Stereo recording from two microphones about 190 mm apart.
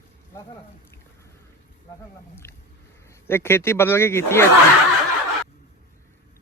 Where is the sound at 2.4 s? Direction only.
15° left (ahead or behind).